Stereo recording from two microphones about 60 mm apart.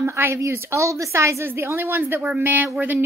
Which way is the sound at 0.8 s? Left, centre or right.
Right.